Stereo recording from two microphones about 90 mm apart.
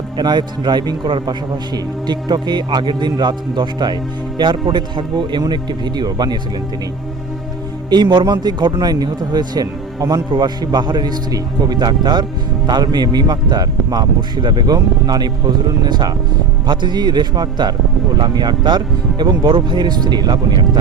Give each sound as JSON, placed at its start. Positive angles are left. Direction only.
{"t": 0.2, "sound": "a man's voice", "side_deg": -55}
{"t": 7.9, "sound": "a man's voice", "side_deg": -55}